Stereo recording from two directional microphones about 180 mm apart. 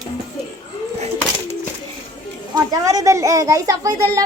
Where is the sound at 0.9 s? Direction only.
35° right (ahead or behind).